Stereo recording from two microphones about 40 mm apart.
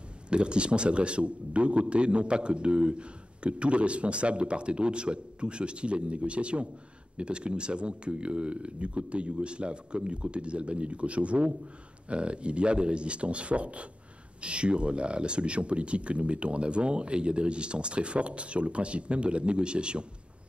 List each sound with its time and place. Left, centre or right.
0.3 s a man's voice: right